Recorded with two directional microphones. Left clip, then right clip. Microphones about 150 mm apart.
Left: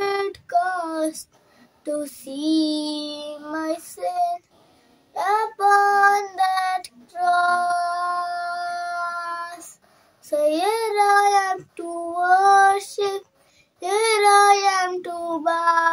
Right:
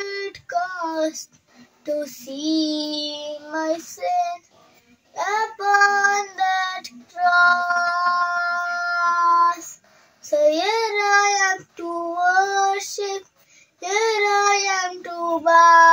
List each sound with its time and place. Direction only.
0.1 s female singing: 45° left (ahead or behind)
2.0 s child singing: 45° left (ahead or behind)